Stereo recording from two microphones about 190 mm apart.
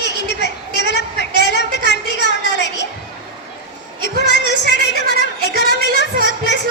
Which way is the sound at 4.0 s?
65° left (ahead or behind).